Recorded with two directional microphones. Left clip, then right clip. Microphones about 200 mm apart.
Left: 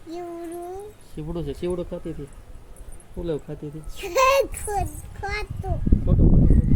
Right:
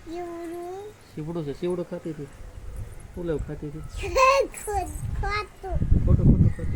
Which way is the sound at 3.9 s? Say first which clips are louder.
Left 1 dB; 20° left (ahead or behind).